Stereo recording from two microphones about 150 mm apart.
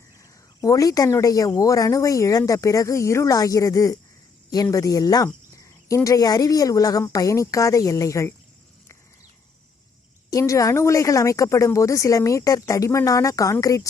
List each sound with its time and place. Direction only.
0.2 s speech: 20° left (ahead or behind)
10.2 s speech: 20° left (ahead or behind)